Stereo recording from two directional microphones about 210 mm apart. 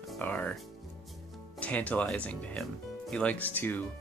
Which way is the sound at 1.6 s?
5° left (ahead or behind).